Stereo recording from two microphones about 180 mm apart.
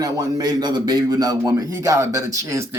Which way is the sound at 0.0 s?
20° right (ahead or behind).